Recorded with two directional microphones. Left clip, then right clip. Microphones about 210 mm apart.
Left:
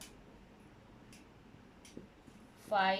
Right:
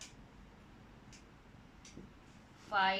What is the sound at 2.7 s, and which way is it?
Speech, 30° left (ahead or behind).